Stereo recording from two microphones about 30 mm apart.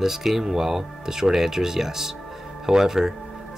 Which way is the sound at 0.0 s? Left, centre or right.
Centre.